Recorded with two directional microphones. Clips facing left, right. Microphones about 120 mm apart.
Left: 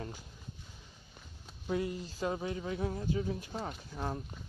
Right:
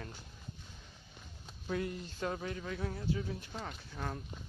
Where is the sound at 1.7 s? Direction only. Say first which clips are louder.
Left 3 dB; 15° left (ahead or behind).